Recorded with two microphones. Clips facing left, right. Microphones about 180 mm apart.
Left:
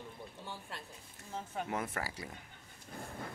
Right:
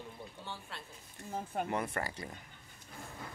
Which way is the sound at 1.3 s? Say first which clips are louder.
Right 3 dB; 50° right (ahead or behind).